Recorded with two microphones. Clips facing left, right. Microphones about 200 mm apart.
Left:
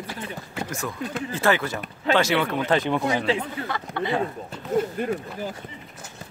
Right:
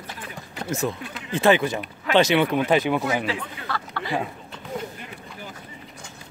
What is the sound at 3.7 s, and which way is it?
Speech, 20° left (ahead or behind).